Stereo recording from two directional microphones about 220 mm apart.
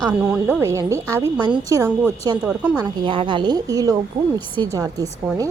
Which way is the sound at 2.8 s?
20° right (ahead or behind).